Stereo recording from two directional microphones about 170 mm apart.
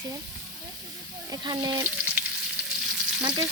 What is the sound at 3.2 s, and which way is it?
Speech, 20° right (ahead or behind).